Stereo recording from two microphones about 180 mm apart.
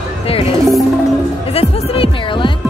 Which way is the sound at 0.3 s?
30° left (ahead or behind).